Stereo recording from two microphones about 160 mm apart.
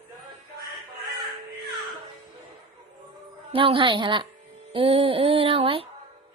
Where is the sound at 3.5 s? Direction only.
35° right (ahead or behind).